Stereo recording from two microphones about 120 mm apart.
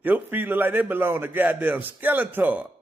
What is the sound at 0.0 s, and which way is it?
Speech, 15° right (ahead or behind).